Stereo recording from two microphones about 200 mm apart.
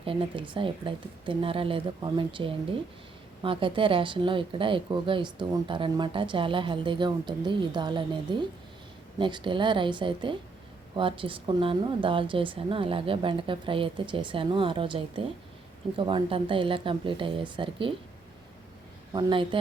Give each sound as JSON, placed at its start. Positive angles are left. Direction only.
{"t": 0.0, "sound": "speech", "side_deg": -25}
{"t": 19.1, "sound": "speech", "side_deg": -25}